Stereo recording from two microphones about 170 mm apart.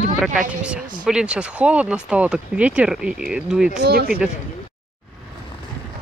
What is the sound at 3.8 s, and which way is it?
Speech, 65° right (ahead or behind).